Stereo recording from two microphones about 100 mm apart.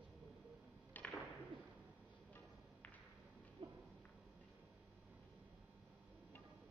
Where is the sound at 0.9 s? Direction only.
15° left (ahead or behind).